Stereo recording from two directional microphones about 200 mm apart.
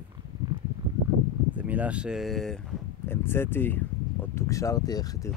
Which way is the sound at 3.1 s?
10° left (ahead or behind).